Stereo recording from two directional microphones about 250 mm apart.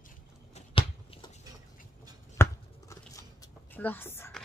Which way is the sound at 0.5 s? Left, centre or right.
Left.